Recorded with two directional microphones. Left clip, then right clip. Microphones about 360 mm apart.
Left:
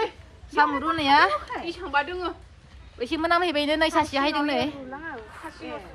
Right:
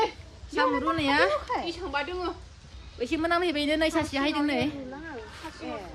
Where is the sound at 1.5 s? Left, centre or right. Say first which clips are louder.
Right 1 dB; centre.